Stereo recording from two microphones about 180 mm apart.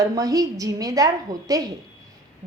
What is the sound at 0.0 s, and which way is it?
A woman's voice, 20° right (ahead or behind).